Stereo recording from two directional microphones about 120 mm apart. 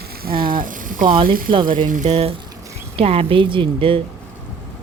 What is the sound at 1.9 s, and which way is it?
Speech, 75° right (ahead or behind).